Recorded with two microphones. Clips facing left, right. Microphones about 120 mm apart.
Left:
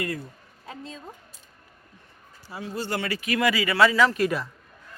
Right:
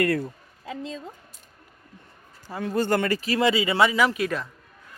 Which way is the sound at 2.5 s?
50° right (ahead or behind).